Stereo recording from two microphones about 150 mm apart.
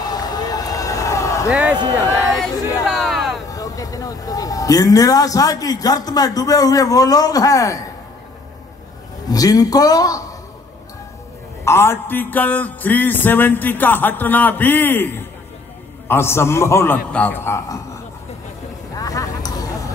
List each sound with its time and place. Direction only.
0.0 s run: 25° left (ahead or behind)
1.5 s speech: 5° right (ahead or behind)
3.0 s a sound: centre (ahead or behind)
3.4 s a man's voice: 25° left (ahead or behind)
9.3 s a man's voice: 25° left (ahead or behind)
11.6 s music: 15° left (ahead or behind)
18.9 s vehicle: 25° left (ahead or behind)